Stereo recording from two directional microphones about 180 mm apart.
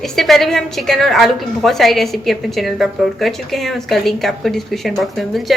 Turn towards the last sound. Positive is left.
turn(degrees=0)  # may be behind; listen again after turning